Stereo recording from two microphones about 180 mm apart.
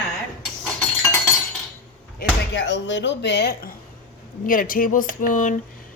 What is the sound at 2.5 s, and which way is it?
Speech, 80° left.